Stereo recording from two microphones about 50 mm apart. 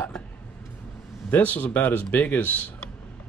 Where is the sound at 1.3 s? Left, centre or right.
Left.